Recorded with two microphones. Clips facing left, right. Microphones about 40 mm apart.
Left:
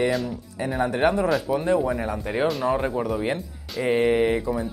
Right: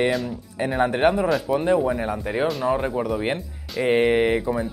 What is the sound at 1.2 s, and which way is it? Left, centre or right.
Speech, centre.